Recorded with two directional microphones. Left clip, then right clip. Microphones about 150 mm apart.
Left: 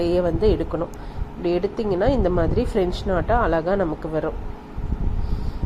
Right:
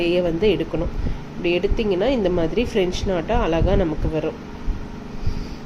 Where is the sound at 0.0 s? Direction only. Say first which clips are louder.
Right 1 dB; 25° left (ahead or behind).